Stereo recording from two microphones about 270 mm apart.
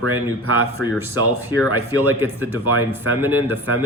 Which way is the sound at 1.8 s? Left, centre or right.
Centre.